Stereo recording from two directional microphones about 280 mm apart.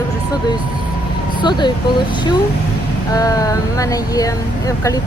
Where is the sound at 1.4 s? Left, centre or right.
Centre.